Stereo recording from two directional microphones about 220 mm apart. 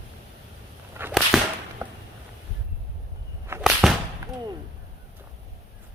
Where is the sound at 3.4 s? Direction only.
10° right (ahead or behind).